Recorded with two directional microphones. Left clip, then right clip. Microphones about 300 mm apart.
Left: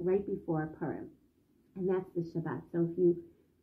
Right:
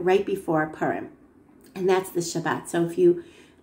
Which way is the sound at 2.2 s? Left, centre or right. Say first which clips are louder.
Right 12 dB; centre.